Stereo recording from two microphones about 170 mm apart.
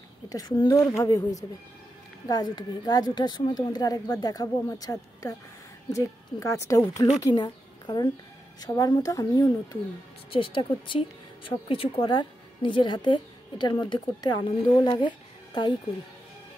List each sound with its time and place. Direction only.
0.3 s a woman's voice: 20° left (ahead or behind)
2.2 s a woman's voice: 25° left (ahead or behind)